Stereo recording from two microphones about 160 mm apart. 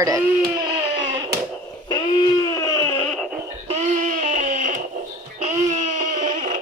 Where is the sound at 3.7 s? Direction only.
50° right (ahead or behind).